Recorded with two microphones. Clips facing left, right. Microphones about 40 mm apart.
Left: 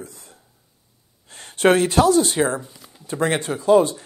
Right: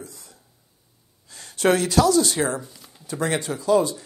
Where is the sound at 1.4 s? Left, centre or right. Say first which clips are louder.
Left 4 dB; left.